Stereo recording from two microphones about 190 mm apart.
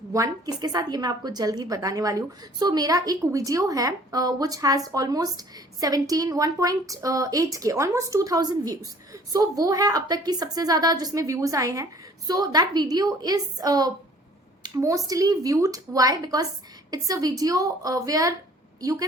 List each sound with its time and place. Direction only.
0.1 s a woman's voice: 20° right (ahead or behind)